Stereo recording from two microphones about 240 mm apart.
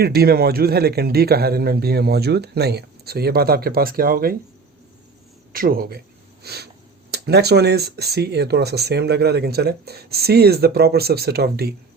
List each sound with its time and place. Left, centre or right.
0.0 s a man's voice: right
5.5 s a man's voice: right
6.4 s a sound: right
7.1 s speech: right